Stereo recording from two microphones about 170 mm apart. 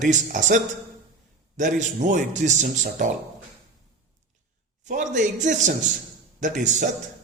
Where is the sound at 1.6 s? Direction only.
45° right (ahead or behind).